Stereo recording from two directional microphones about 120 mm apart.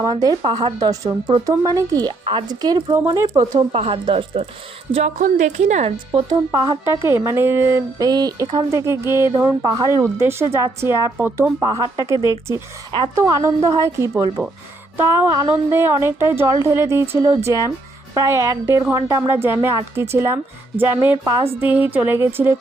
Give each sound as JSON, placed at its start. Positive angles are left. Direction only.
{"t": 0.0, "sound": "speech", "side_deg": -30}
{"t": 3.7, "sound": "speech", "side_deg": -50}
{"t": 4.9, "sound": "a woman's voice", "side_deg": -85}
{"t": 6.1, "sound": "a woman's voice", "side_deg": -35}